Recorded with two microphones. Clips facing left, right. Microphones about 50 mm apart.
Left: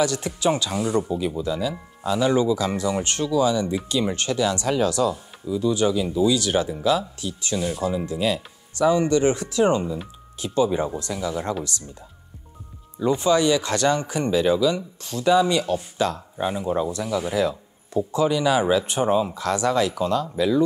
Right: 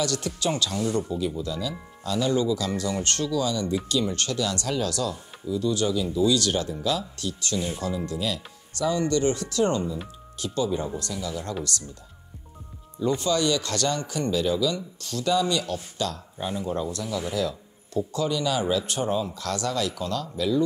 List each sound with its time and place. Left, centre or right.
0.0 s speech: centre
13.0 s speech: left